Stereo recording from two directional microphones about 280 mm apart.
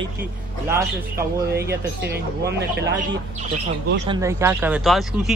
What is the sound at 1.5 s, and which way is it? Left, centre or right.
Speech, right.